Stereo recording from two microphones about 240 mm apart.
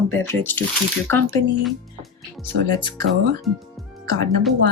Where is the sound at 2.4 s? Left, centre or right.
Centre.